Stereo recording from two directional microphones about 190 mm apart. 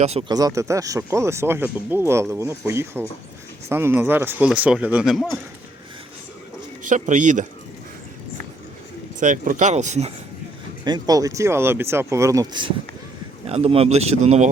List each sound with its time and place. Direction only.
0.0 s speech: 35° right (ahead or behind)
0.3 s speech: 20° right (ahead or behind); by 5.4 s centre (ahead or behind)
6.8 s speech: 40° right (ahead or behind)
9.2 s speech: 45° right (ahead or behind)
10.8 s speech: 20° right (ahead or behind)
13.5 s speech: 30° right (ahead or behind)